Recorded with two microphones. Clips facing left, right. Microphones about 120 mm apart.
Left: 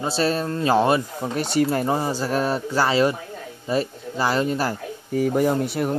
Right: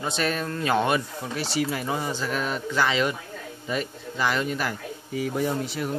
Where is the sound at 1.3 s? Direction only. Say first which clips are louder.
Left 6 dB; 50° left (ahead or behind).